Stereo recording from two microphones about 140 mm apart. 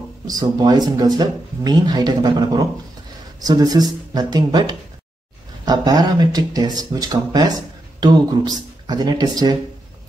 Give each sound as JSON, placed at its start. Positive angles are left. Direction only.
{"t": 0.3, "sound": "speech", "side_deg": -30}